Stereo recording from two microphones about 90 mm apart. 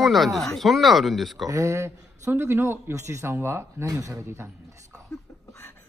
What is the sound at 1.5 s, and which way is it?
A man's voice, 35° right (ahead or behind).